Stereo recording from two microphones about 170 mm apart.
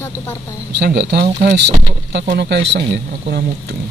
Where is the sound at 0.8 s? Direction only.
75° right (ahead or behind).